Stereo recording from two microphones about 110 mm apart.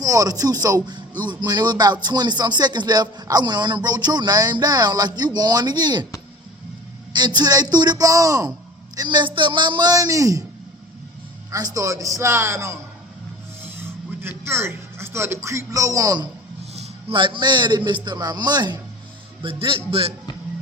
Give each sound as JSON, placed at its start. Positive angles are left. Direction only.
{"t": 0.0, "sound": "music", "side_deg": -30}
{"t": 7.1, "sound": "music", "side_deg": -40}
{"t": 9.0, "sound": "music", "side_deg": -40}
{"t": 11.5, "sound": "music", "side_deg": -35}
{"t": 14.2, "sound": "speech", "side_deg": -20}
{"t": 17.1, "sound": "a man's voice", "side_deg": -50}
{"t": 19.4, "sound": "a man's voice", "side_deg": -55}